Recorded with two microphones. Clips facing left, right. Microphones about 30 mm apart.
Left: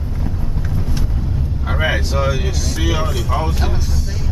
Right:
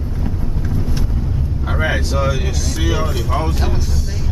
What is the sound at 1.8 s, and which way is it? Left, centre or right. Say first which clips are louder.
Speech: even; centre.